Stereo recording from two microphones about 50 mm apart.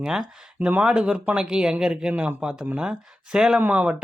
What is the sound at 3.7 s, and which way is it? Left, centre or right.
Speech, right.